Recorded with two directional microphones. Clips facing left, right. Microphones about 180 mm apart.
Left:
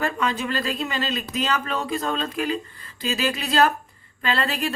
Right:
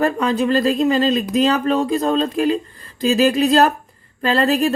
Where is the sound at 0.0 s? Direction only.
40° right (ahead or behind).